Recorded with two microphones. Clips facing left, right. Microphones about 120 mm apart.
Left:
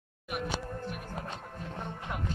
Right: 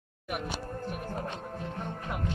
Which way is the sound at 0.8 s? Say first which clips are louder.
Right 3 dB; 40° right (ahead or behind).